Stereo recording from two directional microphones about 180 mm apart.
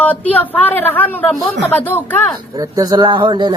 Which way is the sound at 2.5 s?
20° right (ahead or behind).